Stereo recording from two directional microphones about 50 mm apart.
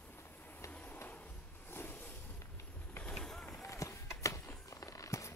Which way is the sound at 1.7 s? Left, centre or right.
Left.